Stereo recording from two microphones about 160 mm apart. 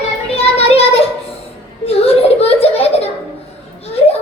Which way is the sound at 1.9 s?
40° left (ahead or behind).